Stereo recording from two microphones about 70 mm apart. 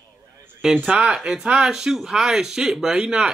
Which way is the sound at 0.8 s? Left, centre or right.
Centre.